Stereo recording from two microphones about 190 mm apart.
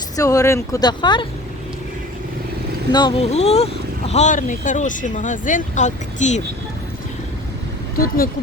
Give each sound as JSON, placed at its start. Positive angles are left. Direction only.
{"t": 0.2, "sound": "speech", "side_deg": 15}
{"t": 2.9, "sound": "speech", "side_deg": 25}
{"t": 3.3, "sound": "speech", "side_deg": 35}
{"t": 7.9, "sound": "speech", "side_deg": 50}